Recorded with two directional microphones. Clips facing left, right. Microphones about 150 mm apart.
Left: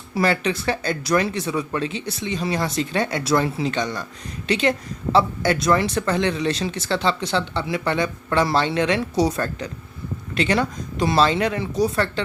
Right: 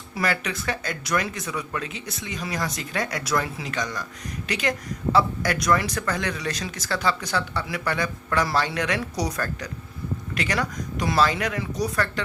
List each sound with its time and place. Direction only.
0.1 s speech: 30° left (ahead or behind)